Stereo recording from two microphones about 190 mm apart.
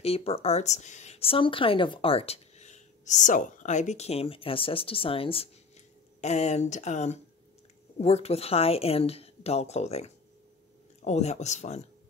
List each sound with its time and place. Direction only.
0.0 s speech: 30° left (ahead or behind)